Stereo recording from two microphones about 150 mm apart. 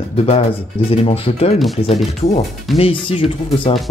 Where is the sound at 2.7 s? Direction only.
40° left (ahead or behind).